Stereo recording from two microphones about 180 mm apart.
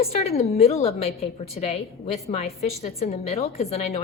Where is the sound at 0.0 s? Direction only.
35° left (ahead or behind).